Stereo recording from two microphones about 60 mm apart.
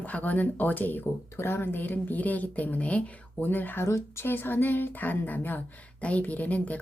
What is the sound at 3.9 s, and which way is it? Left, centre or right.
Speech, left.